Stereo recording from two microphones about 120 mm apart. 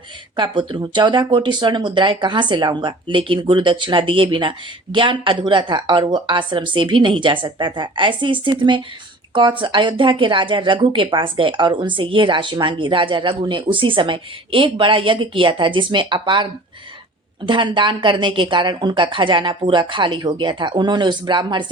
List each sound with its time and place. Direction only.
0.3 s speech: 45° right (ahead or behind)